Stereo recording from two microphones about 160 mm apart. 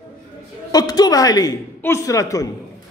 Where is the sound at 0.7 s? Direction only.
25° left (ahead or behind).